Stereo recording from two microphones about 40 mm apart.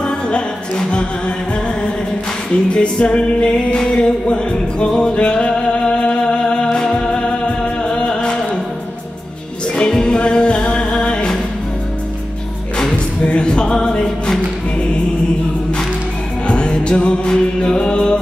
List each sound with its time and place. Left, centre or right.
0.0 s music: left
2.7 s music: left
9.8 s music: left
13.4 s music: left
16.4 s music: left